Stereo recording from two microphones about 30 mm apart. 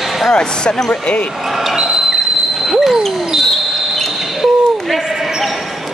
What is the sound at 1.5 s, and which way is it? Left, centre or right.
Basketball bounce, centre.